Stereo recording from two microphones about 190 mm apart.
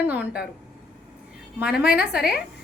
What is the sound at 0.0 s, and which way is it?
Speech, 10° right (ahead or behind).